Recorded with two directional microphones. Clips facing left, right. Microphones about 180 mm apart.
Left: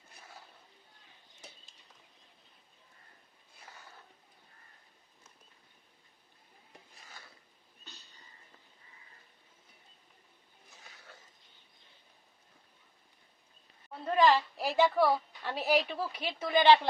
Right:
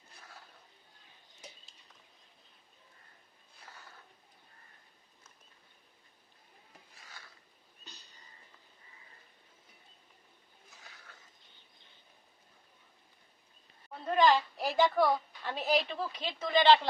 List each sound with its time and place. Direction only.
14.0 s a woman's voice: 5° left (ahead or behind)